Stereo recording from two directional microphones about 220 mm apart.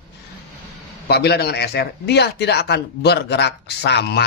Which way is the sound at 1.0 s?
50° left (ahead or behind).